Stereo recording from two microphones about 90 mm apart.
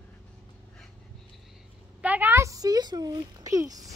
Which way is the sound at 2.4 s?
40° right (ahead or behind).